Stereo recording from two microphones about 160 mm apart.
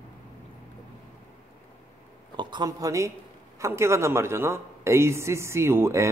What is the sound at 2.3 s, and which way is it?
Speech, 25° right (ahead or behind).